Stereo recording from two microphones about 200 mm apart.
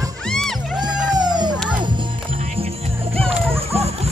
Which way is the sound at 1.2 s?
20° right (ahead or behind).